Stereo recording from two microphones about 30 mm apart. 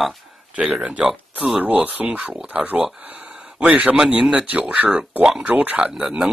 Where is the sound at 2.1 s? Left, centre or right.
Right.